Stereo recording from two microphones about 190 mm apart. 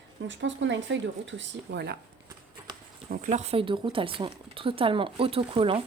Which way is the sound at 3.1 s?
40° right (ahead or behind).